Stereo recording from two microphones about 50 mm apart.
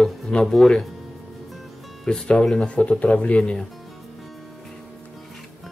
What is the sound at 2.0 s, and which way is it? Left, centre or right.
Speech, centre.